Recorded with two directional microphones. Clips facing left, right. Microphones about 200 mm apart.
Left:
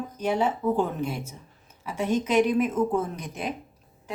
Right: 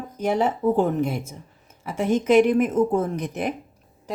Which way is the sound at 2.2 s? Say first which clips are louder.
Right 6 dB; 50° right (ahead or behind).